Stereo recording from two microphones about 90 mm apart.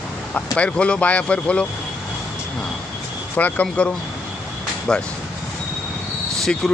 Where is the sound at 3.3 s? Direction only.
15° left (ahead or behind).